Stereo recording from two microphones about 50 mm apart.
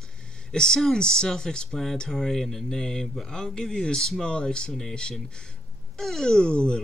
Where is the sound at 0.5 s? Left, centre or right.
Centre.